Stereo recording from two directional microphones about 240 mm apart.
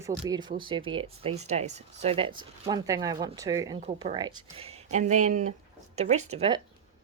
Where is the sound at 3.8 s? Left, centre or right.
Right.